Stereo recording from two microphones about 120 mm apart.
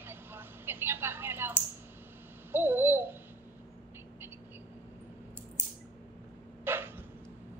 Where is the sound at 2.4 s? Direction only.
20° right (ahead or behind).